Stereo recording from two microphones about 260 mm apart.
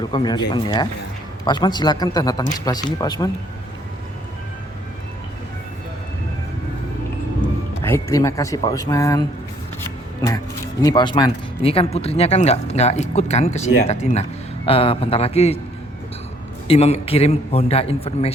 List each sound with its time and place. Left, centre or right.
0.0 s speech: centre
7.8 s speech: centre
16.6 s speech: left